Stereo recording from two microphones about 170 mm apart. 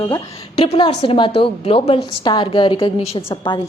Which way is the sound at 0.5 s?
35° left (ahead or behind).